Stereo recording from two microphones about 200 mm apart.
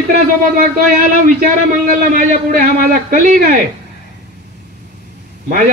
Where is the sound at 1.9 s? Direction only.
45° right (ahead or behind).